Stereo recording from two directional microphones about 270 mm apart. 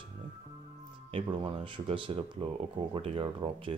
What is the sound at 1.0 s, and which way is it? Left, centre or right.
Speech, centre.